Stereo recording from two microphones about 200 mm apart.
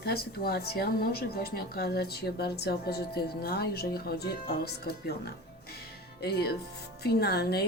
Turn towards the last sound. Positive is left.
turn(degrees=55)  # may be behind; listen again after turning